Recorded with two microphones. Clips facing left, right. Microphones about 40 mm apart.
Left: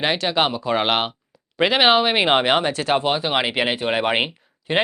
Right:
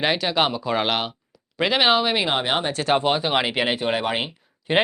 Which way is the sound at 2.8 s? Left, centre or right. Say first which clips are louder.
Even; centre.